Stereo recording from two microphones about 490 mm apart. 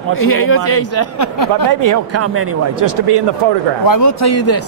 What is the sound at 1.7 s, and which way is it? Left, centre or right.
Speech, right.